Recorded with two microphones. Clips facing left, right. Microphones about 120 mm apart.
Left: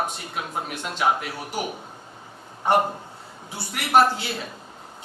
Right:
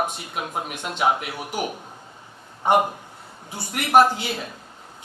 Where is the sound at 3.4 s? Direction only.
50° right (ahead or behind).